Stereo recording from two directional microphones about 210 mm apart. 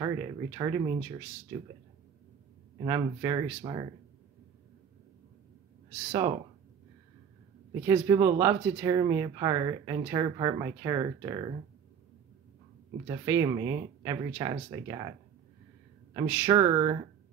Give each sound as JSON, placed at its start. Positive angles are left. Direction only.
{"t": 0.0, "sound": "speech", "side_deg": -15}
{"t": 2.8, "sound": "speech", "side_deg": -20}
{"t": 7.8, "sound": "speech", "side_deg": -15}
{"t": 13.1, "sound": "speech", "side_deg": -15}